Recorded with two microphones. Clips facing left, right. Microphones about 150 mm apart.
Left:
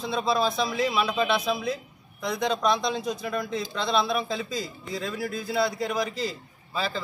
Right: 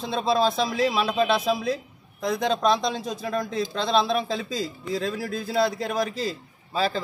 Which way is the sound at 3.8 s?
35° right (ahead or behind).